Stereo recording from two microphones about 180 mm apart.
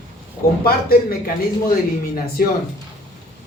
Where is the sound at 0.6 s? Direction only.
55° left (ahead or behind).